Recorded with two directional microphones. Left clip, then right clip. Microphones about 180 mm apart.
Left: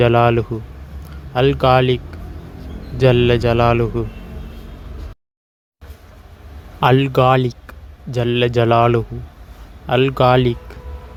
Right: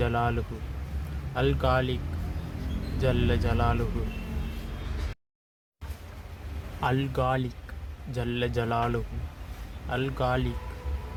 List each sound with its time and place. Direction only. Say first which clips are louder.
0.0 s speech: left 15 dB; 45° left (ahead or behind)
3.0 s speech: left 15 dB; 45° left (ahead or behind)
6.7 s speech: left 14 dB; 45° left (ahead or behind)